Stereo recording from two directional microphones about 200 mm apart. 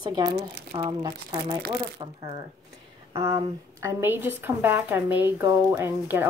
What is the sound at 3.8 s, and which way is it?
A woman's voice, 10° right (ahead or behind).